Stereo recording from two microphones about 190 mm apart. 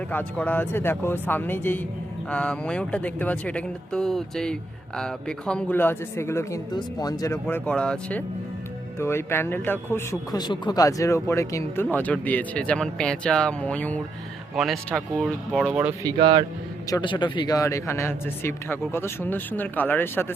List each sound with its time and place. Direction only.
0.1 s speech: 10° left (ahead or behind)
7.4 s speech: 5° left (ahead or behind)
16.1 s a man's voice: 25° right (ahead or behind)
16.9 s speech: 25° left (ahead or behind)